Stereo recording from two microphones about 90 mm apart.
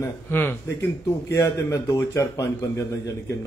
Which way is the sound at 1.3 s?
35° left (ahead or behind).